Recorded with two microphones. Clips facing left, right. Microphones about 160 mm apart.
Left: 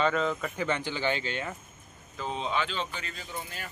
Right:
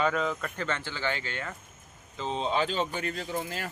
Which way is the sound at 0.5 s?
15° left (ahead or behind).